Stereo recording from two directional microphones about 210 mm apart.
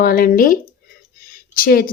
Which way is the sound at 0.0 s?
45° left (ahead or behind).